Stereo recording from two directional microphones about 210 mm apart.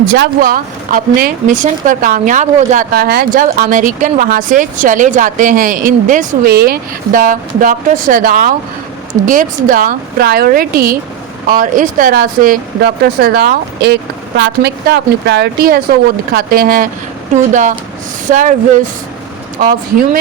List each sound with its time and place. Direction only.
0.1 s speech: 45° right (ahead or behind)